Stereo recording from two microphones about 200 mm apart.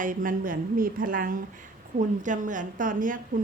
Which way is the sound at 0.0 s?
40° right (ahead or behind).